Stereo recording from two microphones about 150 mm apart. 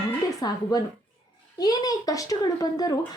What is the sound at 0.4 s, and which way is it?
A woman's voice, 25° left (ahead or behind).